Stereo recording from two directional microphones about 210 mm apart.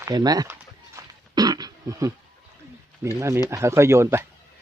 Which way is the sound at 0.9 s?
20° right (ahead or behind).